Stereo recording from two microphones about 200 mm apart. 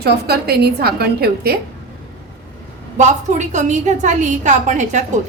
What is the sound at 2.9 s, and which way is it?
A woman's voice, 35° right (ahead or behind).